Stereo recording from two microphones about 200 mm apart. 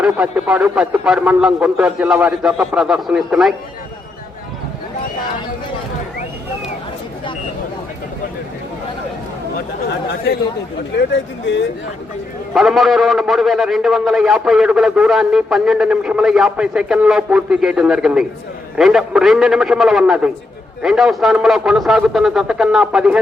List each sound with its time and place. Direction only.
0.0 s a man's voice: 5° right (ahead or behind)
10.9 s speech: 60° left (ahead or behind)
12.5 s a man's voice: centre (ahead or behind)